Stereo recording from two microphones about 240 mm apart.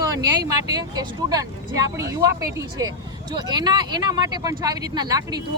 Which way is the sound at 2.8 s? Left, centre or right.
Centre.